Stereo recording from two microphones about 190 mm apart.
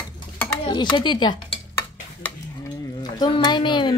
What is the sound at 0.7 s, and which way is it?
Speech, 20° left (ahead or behind).